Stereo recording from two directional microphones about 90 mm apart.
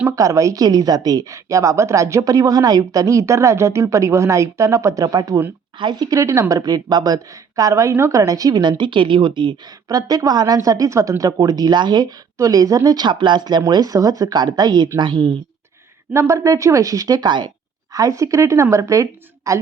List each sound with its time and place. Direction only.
0.2 s a woman's voice: 35° right (ahead or behind); by 6.1 s 50° right (ahead or behind)
6.1 s a woman's voice: 35° right (ahead or behind)
8.8 s speech: 65° right (ahead or behind)
9.9 s speech: 45° right (ahead or behind); by 15.3 s 60° right (ahead or behind)
16.1 s a woman's voice: 35° right (ahead or behind); by 17.5 s 55° right (ahead or behind)
17.9 s a woman's voice: 40° right (ahead or behind)